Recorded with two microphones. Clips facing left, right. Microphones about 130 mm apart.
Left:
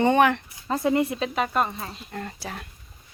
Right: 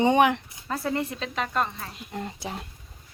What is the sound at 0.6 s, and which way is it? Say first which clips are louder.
Speech: left 6 dB; 20° left (ahead or behind).